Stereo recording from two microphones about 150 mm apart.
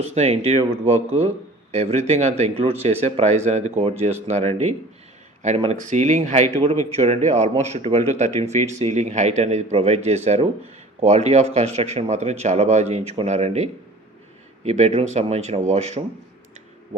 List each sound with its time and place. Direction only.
0.0 s speech: 45° right (ahead or behind)
5.4 s speech: 50° right (ahead or behind)